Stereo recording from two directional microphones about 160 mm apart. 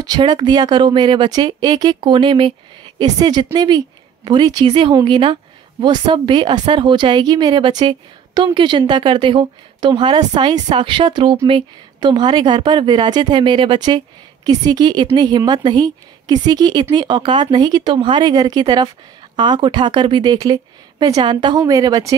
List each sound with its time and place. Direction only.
0.0 s a woman's voice: 25° right (ahead or behind)